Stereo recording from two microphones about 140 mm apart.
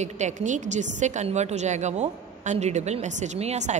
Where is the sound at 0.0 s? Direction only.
60° right (ahead or behind).